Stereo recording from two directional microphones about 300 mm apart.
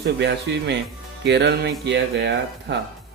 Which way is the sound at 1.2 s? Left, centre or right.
Right.